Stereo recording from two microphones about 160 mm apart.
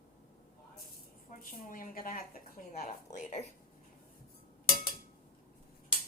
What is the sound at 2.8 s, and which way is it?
Speech, 50° left (ahead or behind).